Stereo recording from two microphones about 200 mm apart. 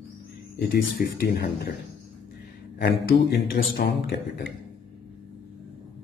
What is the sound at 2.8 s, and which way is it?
A man's voice, 50° left (ahead or behind).